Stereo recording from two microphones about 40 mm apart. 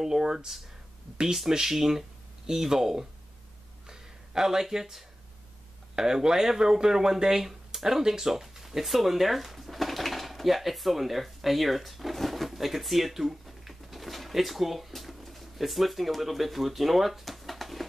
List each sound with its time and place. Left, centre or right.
0.0 s speech: centre
3.8 s a sound: centre
5.9 s speech: centre